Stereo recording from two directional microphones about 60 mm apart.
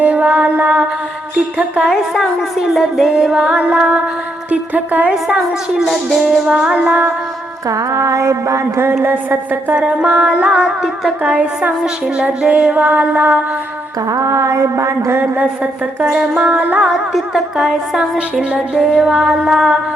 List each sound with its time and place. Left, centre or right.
0.0 s mantra: right
1.8 s music: centre; by 5.1 s right
5.7 s music: centre
6.7 s music: right
7.7 s a sound: right
10.0 s music: centre
11.2 s music: right
14.1 s a sound: right
15.2 s music: right
16.9 s music: centre